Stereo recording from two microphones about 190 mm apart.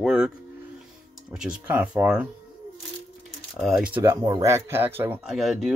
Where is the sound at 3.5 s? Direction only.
5° right (ahead or behind).